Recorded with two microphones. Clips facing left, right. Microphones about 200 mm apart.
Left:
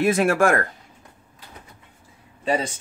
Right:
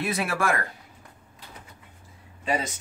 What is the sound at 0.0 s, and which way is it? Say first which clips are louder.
Speech: left 9 dB; 45° left (ahead or behind).